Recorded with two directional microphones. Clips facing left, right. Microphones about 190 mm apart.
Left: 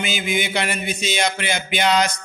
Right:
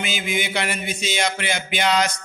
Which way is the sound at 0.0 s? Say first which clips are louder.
Left 2 dB; 20° left (ahead or behind).